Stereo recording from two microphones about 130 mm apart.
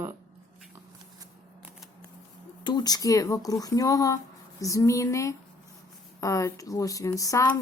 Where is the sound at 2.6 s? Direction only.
30° left (ahead or behind).